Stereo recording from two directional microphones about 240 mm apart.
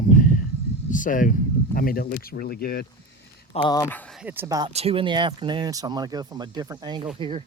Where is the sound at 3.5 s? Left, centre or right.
Left; by 4.7 s centre.